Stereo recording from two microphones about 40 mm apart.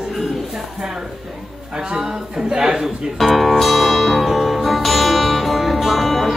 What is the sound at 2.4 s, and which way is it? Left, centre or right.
Music, right.